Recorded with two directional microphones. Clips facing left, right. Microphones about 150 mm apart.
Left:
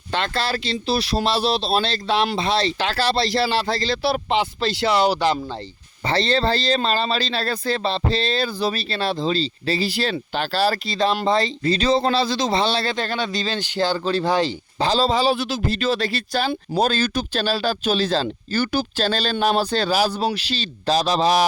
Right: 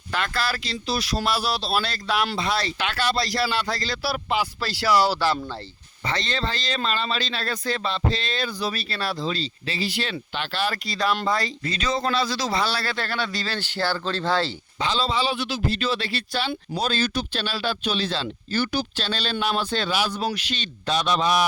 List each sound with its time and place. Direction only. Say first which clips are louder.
0.1 s speech: left 3 dB; 25° left (ahead or behind)
6.0 s speech: left 7 dB; 30° left (ahead or behind)
10.8 s speech: left 4 dB; 25° left (ahead or behind)
14.8 s speech: left 5 dB; 40° left (ahead or behind)